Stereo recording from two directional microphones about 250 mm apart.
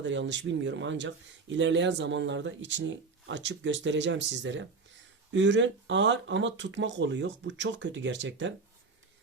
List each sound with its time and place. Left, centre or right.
0.0 s speech: right